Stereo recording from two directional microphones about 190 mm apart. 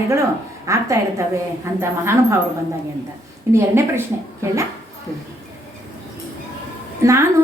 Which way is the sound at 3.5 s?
15° right (ahead or behind).